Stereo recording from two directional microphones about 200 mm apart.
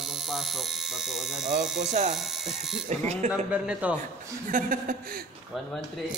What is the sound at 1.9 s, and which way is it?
Speech, 35° right (ahead or behind).